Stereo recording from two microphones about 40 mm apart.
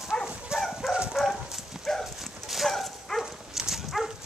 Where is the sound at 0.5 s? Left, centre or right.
Right.